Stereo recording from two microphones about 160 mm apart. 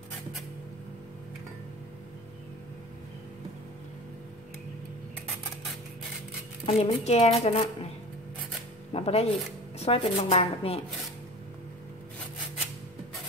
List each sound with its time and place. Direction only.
6.6 s speech: 40° left (ahead or behind)
8.9 s speech: 40° left (ahead or behind)